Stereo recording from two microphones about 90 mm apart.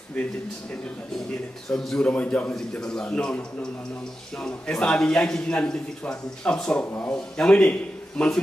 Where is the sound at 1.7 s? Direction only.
5° left (ahead or behind); by 7.1 s 20° left (ahead or behind).